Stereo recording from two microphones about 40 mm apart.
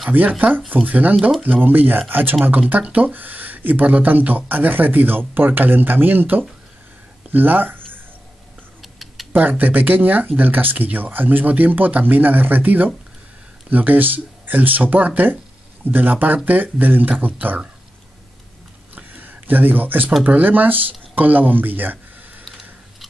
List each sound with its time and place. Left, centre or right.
0.1 s speech: right
2.9 s speech: right
7.2 s a sound: right
8.8 s tick: centre
9.3 s speech: right
18.9 s a sound: right
20.2 s speech: right